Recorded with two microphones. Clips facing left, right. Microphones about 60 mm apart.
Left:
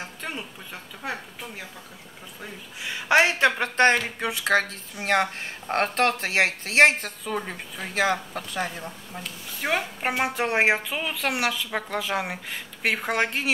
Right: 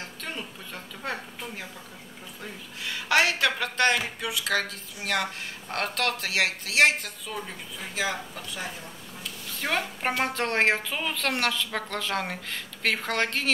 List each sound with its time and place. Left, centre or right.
0.0 s a sound: centre
1.0 s a woman's voice: centre
2.4 s speech: centre; by 8.2 s left
9.6 s a woman's voice: centre